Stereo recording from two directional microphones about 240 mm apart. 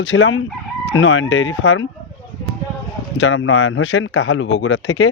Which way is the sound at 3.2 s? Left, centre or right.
Left.